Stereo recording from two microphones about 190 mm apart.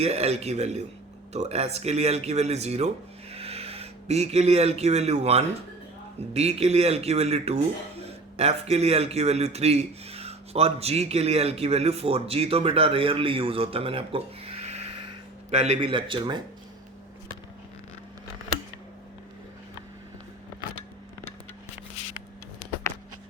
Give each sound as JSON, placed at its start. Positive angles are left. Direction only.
{"t": 0.0, "sound": "a man's voice", "side_deg": -35}